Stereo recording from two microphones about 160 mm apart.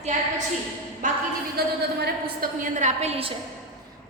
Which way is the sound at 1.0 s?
55° right (ahead or behind).